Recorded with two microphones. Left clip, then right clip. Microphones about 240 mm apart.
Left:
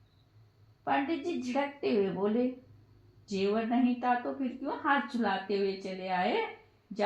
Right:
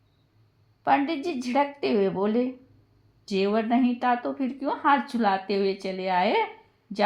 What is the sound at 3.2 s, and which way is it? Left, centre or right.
A woman's voice, right.